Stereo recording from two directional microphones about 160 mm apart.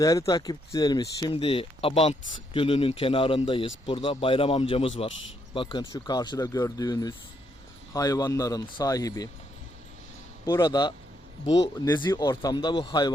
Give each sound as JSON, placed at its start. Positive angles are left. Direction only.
{"t": 0.0, "sound": "speech", "side_deg": 20}
{"t": 10.4, "sound": "speech", "side_deg": 25}